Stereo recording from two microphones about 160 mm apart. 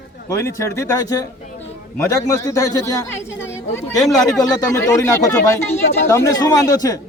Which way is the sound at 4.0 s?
Centre (ahead or behind).